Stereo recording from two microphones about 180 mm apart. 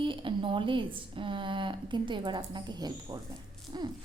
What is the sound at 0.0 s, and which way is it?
A woman's voice, 30° right (ahead or behind).